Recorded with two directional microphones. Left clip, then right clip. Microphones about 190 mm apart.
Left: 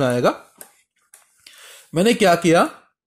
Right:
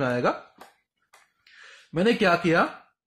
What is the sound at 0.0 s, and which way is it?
Speech, 35° left (ahead or behind).